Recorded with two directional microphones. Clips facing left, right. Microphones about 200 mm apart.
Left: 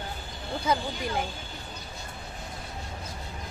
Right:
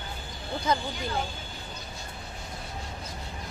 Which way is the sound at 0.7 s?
10° left (ahead or behind).